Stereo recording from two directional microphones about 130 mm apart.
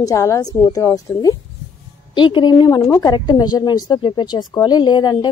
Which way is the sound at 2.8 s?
20° left (ahead or behind).